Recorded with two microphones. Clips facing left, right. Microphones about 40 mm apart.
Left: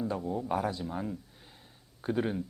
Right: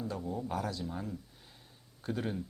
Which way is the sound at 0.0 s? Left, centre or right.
Centre.